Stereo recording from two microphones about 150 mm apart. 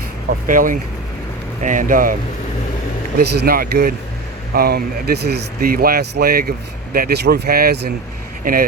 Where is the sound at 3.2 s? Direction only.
90° right.